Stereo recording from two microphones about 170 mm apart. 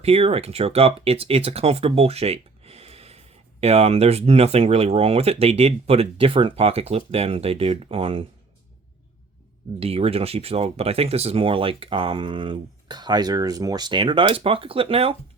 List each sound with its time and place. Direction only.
0.0 s speech: 35° right (ahead or behind)
9.8 s speech: 35° right (ahead or behind)